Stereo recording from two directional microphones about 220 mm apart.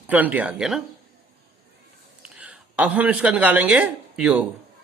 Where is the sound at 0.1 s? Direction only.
5° right (ahead or behind).